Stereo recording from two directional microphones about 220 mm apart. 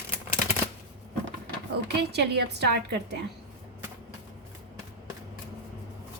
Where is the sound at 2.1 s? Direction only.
50° right (ahead or behind).